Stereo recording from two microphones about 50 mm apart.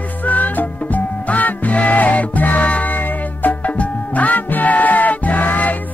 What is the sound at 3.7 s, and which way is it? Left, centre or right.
Music, left.